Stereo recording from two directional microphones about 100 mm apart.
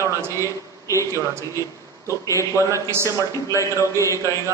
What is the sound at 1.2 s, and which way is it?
Speech, 30° right (ahead or behind).